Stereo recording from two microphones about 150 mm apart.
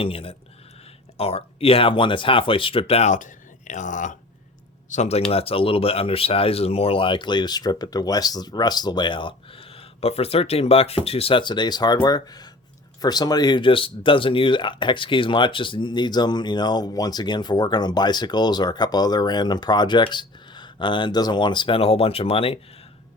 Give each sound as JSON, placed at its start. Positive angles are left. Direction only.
{"t": 0.0, "sound": "speech", "side_deg": 40}
{"t": 4.9, "sound": "speech", "side_deg": 45}